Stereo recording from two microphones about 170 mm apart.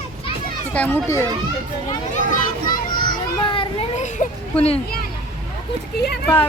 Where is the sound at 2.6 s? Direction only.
25° left (ahead or behind).